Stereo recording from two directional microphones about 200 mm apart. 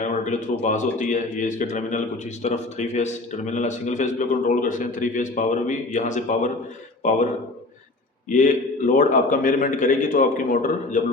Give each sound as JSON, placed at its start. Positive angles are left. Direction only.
{"t": 0.0, "sound": "a sound", "side_deg": 40}
{"t": 0.6, "sound": "speech", "side_deg": 35}
{"t": 8.3, "sound": "speech", "side_deg": 40}